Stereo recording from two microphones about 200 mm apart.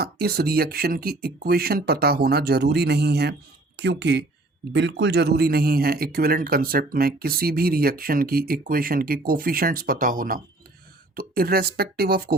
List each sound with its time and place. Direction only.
0.0 s speech: 50° right (ahead or behind)